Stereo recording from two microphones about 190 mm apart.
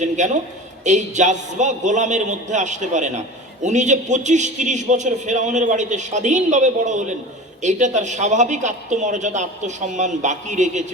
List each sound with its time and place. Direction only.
0.2 s a man's voice: 40° right (ahead or behind)